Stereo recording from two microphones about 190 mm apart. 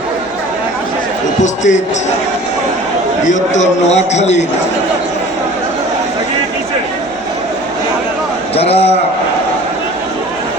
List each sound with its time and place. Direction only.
1.4 s a man's voice: 40° left (ahead or behind)
3.2 s a man's voice: 40° left (ahead or behind)
8.5 s a man's voice: 30° left (ahead or behind)